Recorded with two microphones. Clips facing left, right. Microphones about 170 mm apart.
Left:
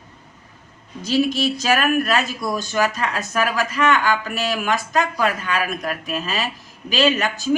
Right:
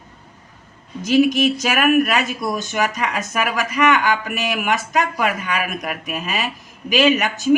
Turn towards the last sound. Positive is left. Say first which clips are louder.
# right 2 dB
turn(degrees=-15)  # may be behind; listen again after turning